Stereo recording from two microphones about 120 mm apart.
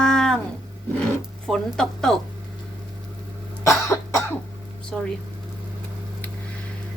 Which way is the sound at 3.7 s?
25° left (ahead or behind).